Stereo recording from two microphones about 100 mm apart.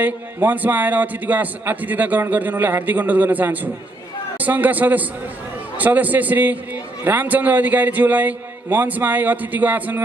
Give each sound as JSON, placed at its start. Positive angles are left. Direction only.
{"t": 0.0, "sound": "a man's voice", "side_deg": -15}